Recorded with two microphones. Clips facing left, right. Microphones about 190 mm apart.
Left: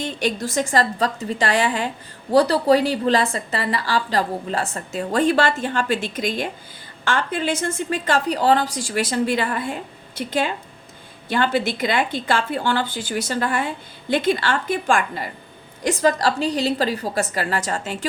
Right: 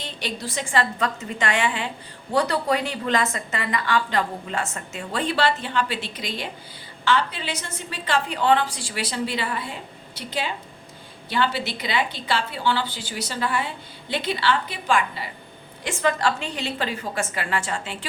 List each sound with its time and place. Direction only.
0.0 s a woman's voice: 50° left (ahead or behind)